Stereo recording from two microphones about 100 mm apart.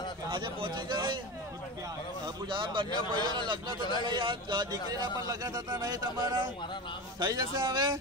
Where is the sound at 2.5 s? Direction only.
55° right (ahead or behind).